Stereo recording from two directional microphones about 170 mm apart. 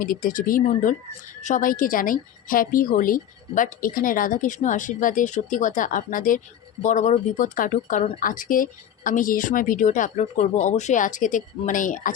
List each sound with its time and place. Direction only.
0.0 s speech: 55° left (ahead or behind)